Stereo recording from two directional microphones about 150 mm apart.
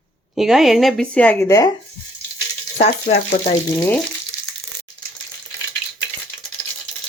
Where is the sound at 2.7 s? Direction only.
45° left (ahead or behind).